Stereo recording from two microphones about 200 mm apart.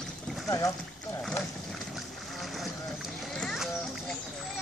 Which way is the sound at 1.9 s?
Centre (ahead or behind).